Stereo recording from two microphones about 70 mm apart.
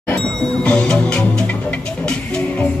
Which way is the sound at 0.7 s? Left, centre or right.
Centre.